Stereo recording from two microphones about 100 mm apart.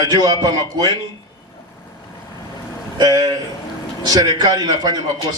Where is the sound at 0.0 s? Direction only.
40° right (ahead or behind).